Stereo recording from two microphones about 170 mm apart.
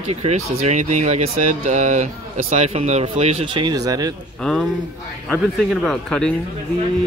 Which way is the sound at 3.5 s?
25° right (ahead or behind).